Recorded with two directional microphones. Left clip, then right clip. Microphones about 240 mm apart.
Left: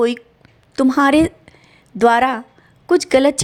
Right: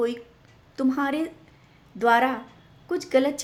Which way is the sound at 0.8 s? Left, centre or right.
Left.